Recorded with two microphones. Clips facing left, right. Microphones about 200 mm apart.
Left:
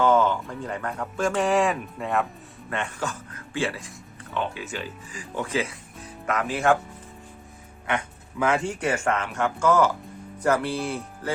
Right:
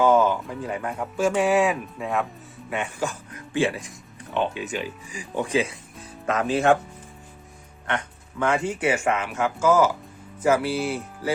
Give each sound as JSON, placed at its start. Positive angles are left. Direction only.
{"t": 0.0, "sound": "speech", "side_deg": -10}
{"t": 7.9, "sound": "speech", "side_deg": 5}